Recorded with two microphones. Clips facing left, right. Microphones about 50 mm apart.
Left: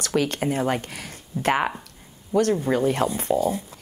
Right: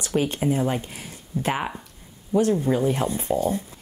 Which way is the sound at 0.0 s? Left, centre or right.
Left.